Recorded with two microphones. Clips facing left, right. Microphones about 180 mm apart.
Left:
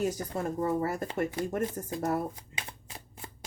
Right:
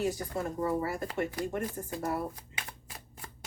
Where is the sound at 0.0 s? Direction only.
45° left (ahead or behind).